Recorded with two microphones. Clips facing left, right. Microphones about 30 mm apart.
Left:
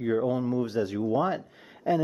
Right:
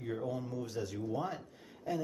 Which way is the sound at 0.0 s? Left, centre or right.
Left.